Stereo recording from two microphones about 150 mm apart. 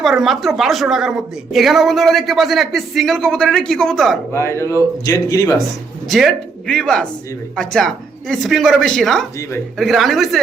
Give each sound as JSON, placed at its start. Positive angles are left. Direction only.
{"t": 0.0, "sound": "a woman's voice", "side_deg": 0}
{"t": 4.3, "sound": "speech", "side_deg": 20}
{"t": 6.1, "sound": "a woman's voice", "side_deg": 0}